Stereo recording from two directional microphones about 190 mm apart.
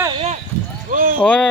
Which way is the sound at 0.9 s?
50° right (ahead or behind).